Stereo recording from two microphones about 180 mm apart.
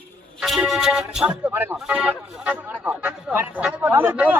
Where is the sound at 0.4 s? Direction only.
Centre (ahead or behind).